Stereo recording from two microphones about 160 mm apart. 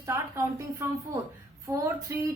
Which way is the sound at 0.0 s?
20° right (ahead or behind).